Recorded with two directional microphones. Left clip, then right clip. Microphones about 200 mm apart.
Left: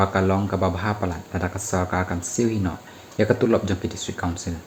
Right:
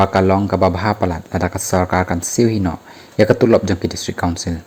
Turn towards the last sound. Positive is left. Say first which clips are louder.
# right 8 dB
turn(degrees=-40)  # may be behind; listen again after turning